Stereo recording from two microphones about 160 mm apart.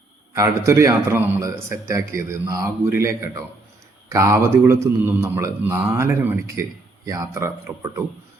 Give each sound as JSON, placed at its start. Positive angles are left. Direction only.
{"t": 0.3, "sound": "a man's voice", "side_deg": -20}